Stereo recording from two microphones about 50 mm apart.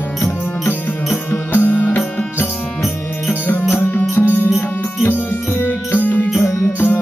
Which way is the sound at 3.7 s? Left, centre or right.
Left.